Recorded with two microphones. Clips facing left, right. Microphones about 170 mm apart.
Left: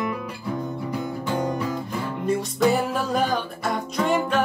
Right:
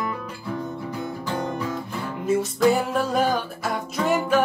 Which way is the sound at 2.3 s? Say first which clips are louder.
Right 2 dB; centre (ahead or behind).